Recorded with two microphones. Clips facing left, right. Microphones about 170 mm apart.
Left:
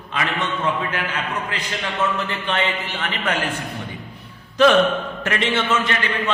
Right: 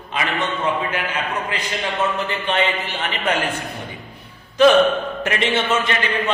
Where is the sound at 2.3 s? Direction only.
15° right (ahead or behind).